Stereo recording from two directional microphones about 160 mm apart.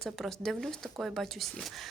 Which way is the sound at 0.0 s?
Centre (ahead or behind).